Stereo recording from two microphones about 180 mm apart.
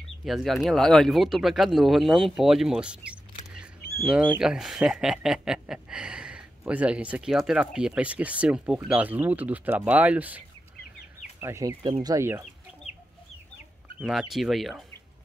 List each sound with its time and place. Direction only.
0.2 s speech: centre (ahead or behind)
11.4 s speech: 15° right (ahead or behind)
13.9 s speech: 5° right (ahead or behind)